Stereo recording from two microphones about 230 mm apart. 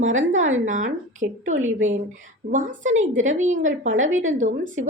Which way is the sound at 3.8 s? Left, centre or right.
Right.